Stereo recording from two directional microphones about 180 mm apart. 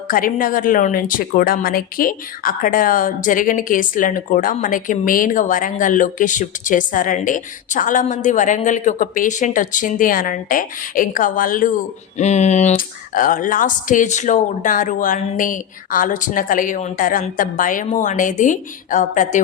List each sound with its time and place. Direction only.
0.1 s speech: 50° left (ahead or behind)
12.1 s speech: 40° left (ahead or behind)